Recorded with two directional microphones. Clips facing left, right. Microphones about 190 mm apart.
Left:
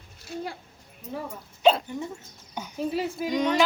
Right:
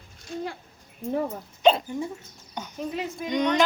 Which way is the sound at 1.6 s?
5° left (ahead or behind).